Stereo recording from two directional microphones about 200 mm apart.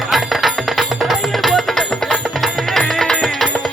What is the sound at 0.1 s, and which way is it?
Music, centre (ahead or behind).